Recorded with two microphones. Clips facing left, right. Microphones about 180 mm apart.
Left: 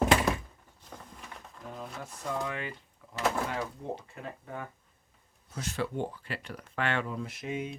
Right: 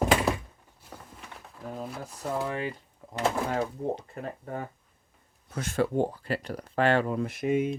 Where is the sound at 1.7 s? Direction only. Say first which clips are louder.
Right 4 dB; 40° right (ahead or behind).